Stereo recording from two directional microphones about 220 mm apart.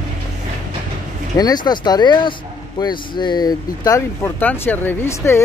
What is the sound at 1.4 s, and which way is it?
Speech, 20° left (ahead or behind).